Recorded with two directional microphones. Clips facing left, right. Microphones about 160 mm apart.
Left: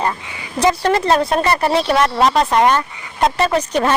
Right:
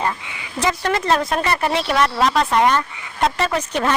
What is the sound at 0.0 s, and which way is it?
Speech, 35° left (ahead or behind).